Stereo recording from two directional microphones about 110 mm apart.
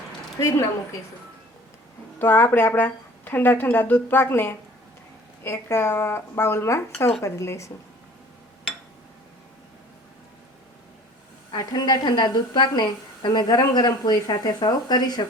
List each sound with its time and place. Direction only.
0.3 s a woman's voice: 25° left (ahead or behind)
2.1 s a woman's voice: 20° left (ahead or behind)
11.5 s a woman's voice: 35° left (ahead or behind)